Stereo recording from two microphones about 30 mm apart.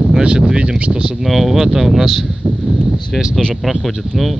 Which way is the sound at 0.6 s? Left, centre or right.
Right.